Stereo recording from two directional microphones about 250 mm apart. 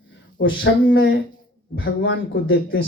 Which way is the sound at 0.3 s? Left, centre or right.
Left.